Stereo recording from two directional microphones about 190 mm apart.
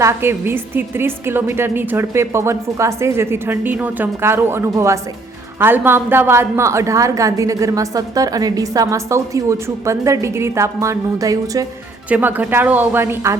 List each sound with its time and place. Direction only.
0.0 s a woman's voice: 15° right (ahead or behind)